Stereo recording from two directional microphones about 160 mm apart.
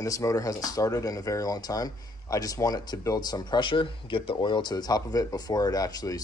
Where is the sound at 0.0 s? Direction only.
20° left (ahead or behind).